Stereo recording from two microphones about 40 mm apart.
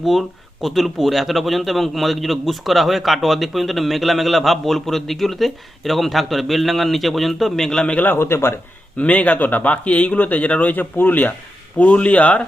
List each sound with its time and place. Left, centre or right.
0.0 s a man's voice: centre
7.6 s a man's voice: centre
8.1 s speech: left
9.0 s speech: left
10.9 s speech: left
11.8 s speech: left